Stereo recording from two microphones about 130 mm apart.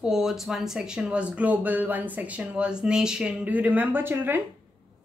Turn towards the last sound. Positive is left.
turn(degrees=-15)  # may be behind; listen again after turning